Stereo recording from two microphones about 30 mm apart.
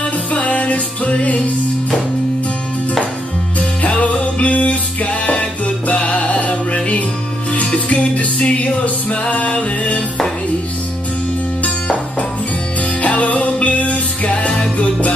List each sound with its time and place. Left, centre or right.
0.3 s music: left
3.8 s music: left
8.4 s music: left
9.1 s music: left
11.6 s music: left
13.0 s music: left